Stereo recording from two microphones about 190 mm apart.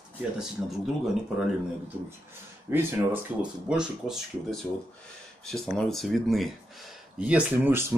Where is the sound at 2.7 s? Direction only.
10° right (ahead or behind).